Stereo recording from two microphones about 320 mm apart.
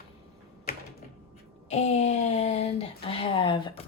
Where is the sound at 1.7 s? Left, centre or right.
Left.